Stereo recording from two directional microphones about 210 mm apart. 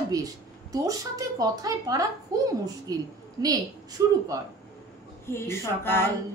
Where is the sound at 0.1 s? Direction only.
15° right (ahead or behind).